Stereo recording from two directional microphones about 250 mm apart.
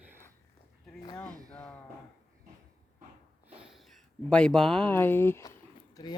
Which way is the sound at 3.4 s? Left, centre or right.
Centre.